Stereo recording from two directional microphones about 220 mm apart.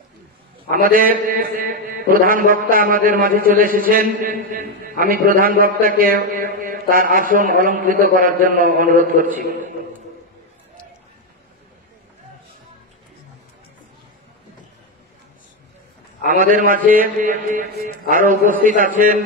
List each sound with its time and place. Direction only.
0.7 s a man's voice: 40° right (ahead or behind)
16.3 s a man's voice: 40° right (ahead or behind)